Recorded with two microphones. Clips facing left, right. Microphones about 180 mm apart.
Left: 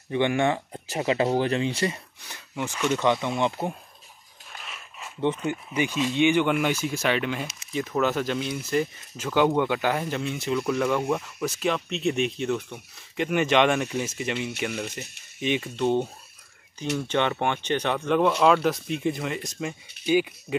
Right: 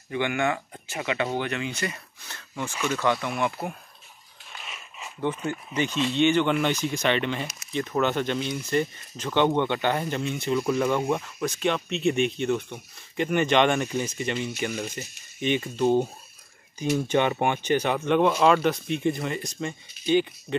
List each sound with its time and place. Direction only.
0.1 s speech: 25° left (ahead or behind)
2.2 s speech: 15° left (ahead or behind)
4.6 s a sound: centre (ahead or behind)
5.2 s speech: 20° left (ahead or behind); by 16.1 s 5° right (ahead or behind)
17.1 s speech: 10° right (ahead or behind); by 20.5 s 5° left (ahead or behind)